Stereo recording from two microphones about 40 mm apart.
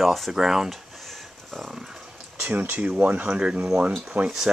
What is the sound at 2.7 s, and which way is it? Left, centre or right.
Speech, right.